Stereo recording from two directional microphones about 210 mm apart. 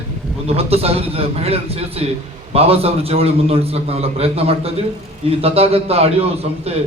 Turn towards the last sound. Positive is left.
turn(degrees=-30)  # may be behind; listen again after turning